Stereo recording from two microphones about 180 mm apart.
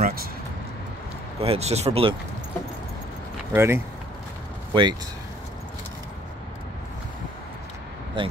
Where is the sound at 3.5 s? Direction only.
15° right (ahead or behind).